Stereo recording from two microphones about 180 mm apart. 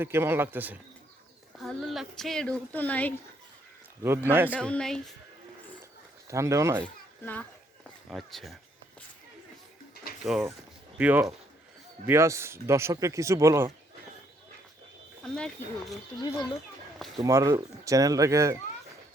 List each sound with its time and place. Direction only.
0.0 s speech: 15° right (ahead or behind)
1.5 s a woman's voice: centre (ahead or behind)
4.3 s speech: 10° right (ahead or behind)
4.5 s a woman's voice: 5° left (ahead or behind)
6.2 s speech: 15° right (ahead or behind)
6.8 s a sound: 10° left (ahead or behind)
8.1 s a woman's voice: centre (ahead or behind)
9.9 s bird: 55° left (ahead or behind)
10.2 s a woman's voice: centre (ahead or behind); by 13.7 s 15° right (ahead or behind)
15.2 s a woman's voice: centre (ahead or behind)
17.2 s speech: 15° right (ahead or behind)